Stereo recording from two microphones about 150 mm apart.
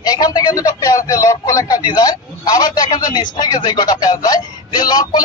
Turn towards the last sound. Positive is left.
turn(degrees=25)  # may be behind; listen again after turning